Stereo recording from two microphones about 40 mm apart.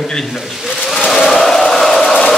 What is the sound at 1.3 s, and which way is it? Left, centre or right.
Chant, centre.